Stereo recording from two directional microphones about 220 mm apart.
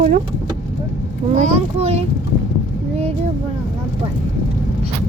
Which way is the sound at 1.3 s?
30° right (ahead or behind).